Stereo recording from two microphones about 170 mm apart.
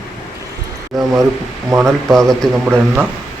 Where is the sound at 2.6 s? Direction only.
10° right (ahead or behind).